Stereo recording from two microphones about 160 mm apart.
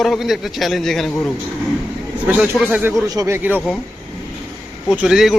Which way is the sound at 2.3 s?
10° right (ahead or behind).